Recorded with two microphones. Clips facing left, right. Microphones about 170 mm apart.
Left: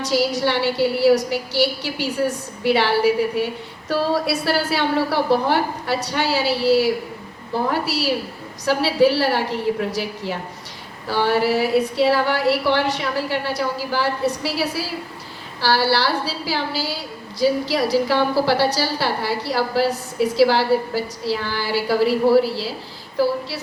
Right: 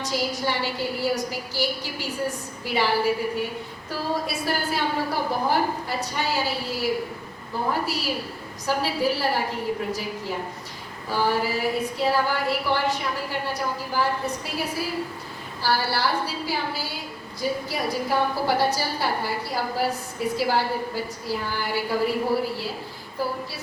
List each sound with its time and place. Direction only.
0.0 s a woman's voice: 75° left (ahead or behind)